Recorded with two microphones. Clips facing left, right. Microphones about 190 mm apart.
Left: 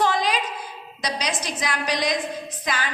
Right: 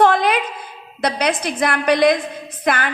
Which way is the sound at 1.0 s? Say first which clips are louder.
Right 8 dB; 55° right (ahead or behind).